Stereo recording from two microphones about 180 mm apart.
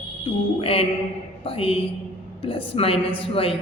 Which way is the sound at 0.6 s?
30° left (ahead or behind).